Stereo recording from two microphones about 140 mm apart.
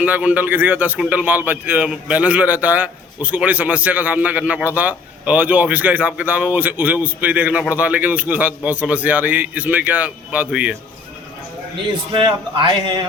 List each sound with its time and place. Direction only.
0.0 s a man's voice: 10° right (ahead or behind)
12.1 s a man's voice: 35° right (ahead or behind)